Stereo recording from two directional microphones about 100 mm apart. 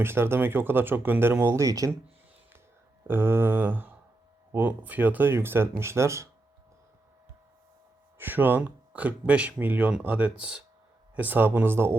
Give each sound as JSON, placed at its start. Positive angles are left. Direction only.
{"t": 0.0, "sound": "speech", "side_deg": -25}
{"t": 3.1, "sound": "speech", "side_deg": -20}
{"t": 8.2, "sound": "speech", "side_deg": -20}